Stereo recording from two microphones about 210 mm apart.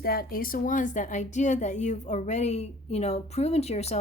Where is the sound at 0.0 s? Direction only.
45° left (ahead or behind).